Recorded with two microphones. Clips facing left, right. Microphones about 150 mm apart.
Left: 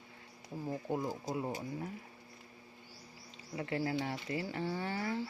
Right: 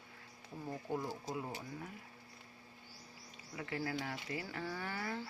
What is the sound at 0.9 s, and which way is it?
Speech, 20° left (ahead or behind).